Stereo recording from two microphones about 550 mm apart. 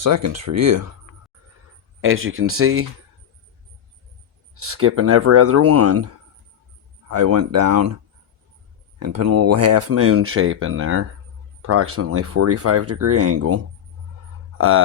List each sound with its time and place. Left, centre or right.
0.0 s speech: right
2.0 s speech: right
4.5 s speech: right
7.1 s speech: right
9.0 s speech: right